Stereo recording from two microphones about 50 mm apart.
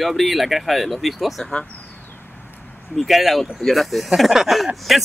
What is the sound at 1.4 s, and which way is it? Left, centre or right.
Speech, centre.